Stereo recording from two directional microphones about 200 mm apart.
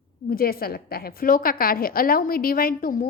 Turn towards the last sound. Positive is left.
turn(degrees=45)  # may be behind; listen again after turning